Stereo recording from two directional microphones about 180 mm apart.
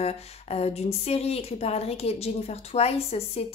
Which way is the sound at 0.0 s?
35° left (ahead or behind).